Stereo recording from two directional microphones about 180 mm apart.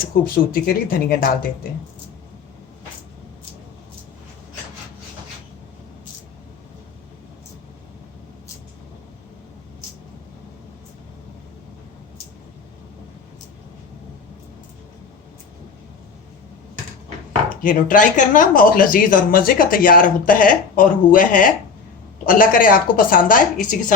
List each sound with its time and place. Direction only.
0.5 s speech: 55° left (ahead or behind)
17.6 s speech: 50° left (ahead or behind)